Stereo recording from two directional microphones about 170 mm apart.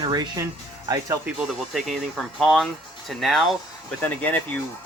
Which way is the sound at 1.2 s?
5° right (ahead or behind).